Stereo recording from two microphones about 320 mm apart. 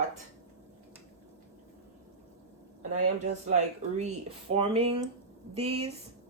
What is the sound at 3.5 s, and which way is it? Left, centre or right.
A woman's voice, right.